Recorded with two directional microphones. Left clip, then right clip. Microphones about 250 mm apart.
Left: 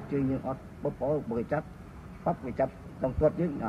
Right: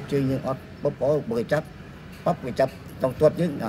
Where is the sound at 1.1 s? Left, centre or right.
Right.